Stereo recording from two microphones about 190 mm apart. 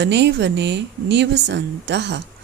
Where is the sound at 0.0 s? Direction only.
65° right (ahead or behind).